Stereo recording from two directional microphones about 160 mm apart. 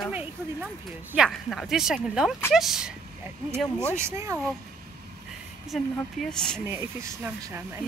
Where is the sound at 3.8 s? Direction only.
15° right (ahead or behind).